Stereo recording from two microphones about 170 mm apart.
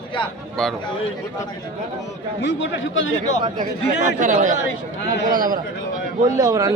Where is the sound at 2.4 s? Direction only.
90° left.